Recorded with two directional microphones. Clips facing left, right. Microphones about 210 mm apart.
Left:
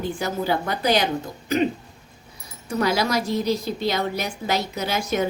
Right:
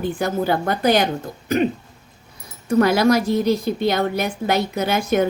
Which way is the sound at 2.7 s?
55° right (ahead or behind).